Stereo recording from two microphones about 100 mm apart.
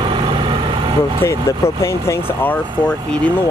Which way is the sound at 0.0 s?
55° right (ahead or behind).